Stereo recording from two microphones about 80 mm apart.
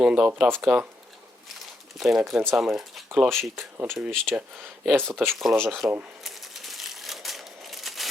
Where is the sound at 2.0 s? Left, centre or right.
Centre.